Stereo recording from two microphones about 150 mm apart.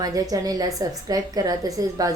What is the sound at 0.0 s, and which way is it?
A woman's voice, 25° right (ahead or behind).